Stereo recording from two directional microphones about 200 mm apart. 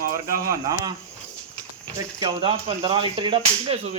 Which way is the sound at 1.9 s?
25° right (ahead or behind).